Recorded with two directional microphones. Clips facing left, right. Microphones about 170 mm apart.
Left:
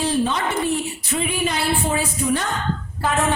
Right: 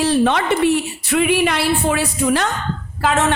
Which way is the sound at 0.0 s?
70° right (ahead or behind).